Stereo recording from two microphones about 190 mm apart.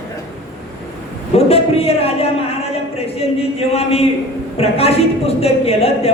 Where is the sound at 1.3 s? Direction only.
30° left (ahead or behind).